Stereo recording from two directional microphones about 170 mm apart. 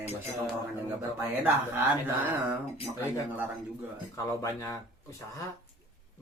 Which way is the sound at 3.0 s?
10° right (ahead or behind).